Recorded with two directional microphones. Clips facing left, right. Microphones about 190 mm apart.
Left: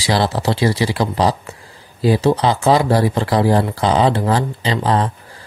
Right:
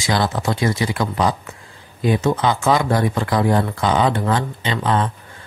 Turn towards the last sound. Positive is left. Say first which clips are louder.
# left 2 dB
turn(degrees=35)  # may be behind; listen again after turning